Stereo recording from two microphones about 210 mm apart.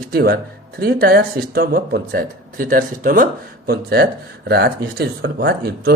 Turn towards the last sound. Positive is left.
turn(degrees=-45)  # may be behind; listen again after turning